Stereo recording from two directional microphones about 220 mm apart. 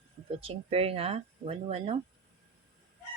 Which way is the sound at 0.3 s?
25° right (ahead or behind).